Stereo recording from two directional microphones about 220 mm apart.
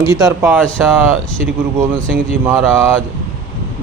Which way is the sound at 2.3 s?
10° right (ahead or behind).